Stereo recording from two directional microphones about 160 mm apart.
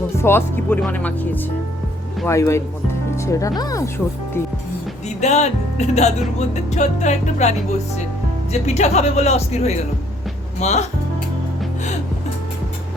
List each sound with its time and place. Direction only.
0.2 s speech: 15° left (ahead or behind)
5.0 s speech: 45° left (ahead or behind)
8.5 s speech: 45° left (ahead or behind)